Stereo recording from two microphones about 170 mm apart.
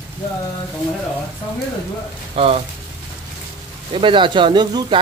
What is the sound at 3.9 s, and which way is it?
Speech, 30° right (ahead or behind).